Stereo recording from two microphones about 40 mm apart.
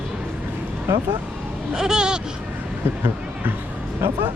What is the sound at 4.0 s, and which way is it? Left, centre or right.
Speech, right.